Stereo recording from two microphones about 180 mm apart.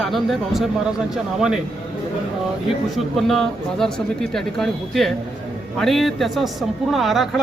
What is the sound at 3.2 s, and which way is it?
Speech, centre (ahead or behind).